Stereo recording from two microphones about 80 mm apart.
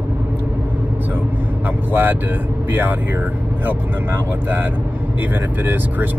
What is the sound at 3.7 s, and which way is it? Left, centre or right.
Speech, right.